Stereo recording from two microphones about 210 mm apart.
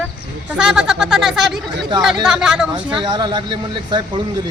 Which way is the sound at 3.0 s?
20° right (ahead or behind).